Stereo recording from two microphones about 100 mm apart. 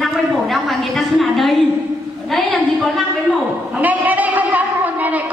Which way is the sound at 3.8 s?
15° right (ahead or behind).